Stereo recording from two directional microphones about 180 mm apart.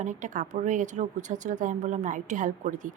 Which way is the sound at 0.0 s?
45° right (ahead or behind).